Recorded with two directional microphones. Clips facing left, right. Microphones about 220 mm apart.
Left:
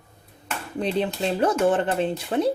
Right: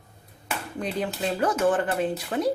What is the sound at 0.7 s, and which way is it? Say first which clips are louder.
Speech: left 5 dB; 25° left (ahead or behind).